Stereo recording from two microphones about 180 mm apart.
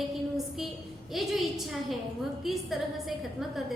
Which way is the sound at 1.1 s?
Centre (ahead or behind).